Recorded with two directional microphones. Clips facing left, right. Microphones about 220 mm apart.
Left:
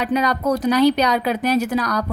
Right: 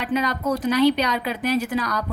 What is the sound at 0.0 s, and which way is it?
A woman's voice, 40° left (ahead or behind).